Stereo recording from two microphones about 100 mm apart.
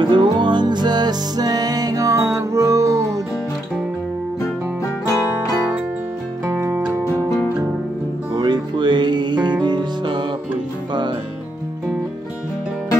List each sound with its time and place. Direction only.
0.0 s music: 55° right (ahead or behind); by 3.2 s 30° right (ahead or behind)
6.4 s music: 20° right (ahead or behind)
8.4 s music: 50° right (ahead or behind)